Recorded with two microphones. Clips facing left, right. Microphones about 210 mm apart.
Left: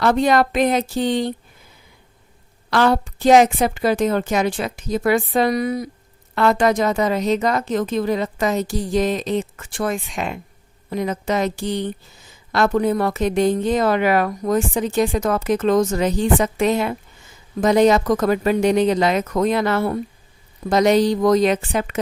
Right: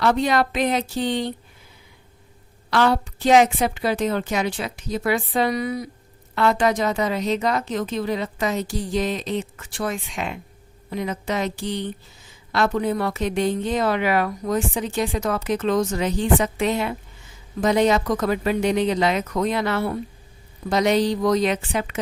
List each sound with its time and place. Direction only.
0.0 s a woman's voice: 50° left (ahead or behind)
2.6 s a woman's voice: 45° left (ahead or behind)